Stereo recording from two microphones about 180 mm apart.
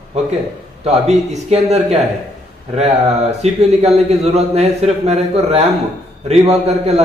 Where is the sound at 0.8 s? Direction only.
35° right (ahead or behind).